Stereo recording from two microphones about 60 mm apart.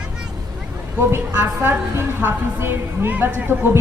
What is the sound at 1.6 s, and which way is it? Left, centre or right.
A woman's voice, right.